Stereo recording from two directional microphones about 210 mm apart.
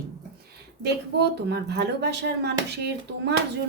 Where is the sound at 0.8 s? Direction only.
50° right (ahead or behind).